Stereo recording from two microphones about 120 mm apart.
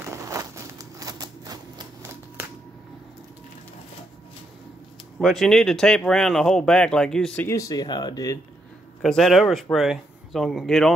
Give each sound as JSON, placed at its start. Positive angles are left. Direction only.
{"t": 0.0, "sound": "a sound", "side_deg": -25}
{"t": 5.2, "sound": "speech", "side_deg": 0}
{"t": 7.4, "sound": "speech", "side_deg": 25}
{"t": 9.0, "sound": "speech", "side_deg": 0}